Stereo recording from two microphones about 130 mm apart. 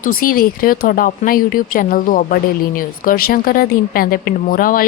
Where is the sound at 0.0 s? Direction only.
90° left.